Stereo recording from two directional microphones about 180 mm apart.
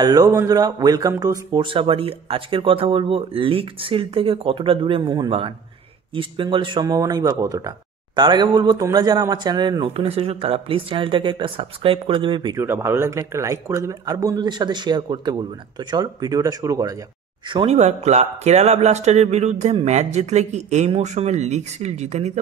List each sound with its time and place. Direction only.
0.0 s speech: 20° right (ahead or behind)
12.6 s speech: 15° right (ahead or behind)
17.5 s speech: 30° right (ahead or behind)